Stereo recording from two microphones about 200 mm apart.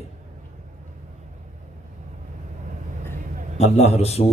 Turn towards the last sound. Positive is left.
turn(degrees=30)  # may be behind; listen again after turning